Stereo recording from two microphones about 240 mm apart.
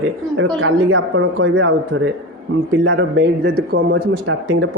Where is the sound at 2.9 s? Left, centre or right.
Right.